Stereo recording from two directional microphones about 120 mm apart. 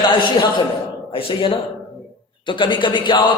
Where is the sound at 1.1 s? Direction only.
45° left (ahead or behind).